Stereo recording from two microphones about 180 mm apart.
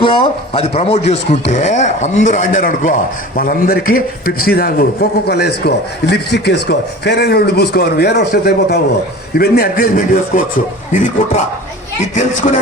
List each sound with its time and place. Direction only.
0.0 s a man's voice: 30° left (ahead or behind)